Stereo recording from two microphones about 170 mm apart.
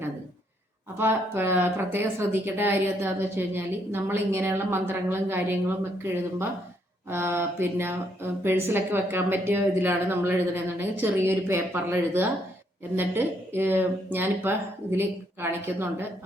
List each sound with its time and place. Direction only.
0.9 s speech: 15° right (ahead or behind)